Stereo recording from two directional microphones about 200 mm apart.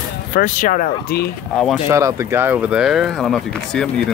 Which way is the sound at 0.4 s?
40° left (ahead or behind).